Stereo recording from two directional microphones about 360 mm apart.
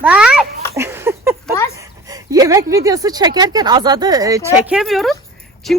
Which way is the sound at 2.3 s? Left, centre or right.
Centre.